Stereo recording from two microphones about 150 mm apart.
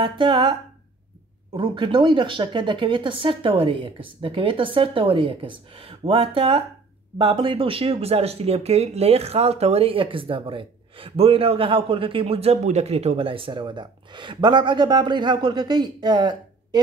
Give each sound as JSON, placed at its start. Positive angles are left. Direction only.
{"t": 0.0, "sound": "speech", "side_deg": -30}
{"t": 1.6, "sound": "speech", "side_deg": -35}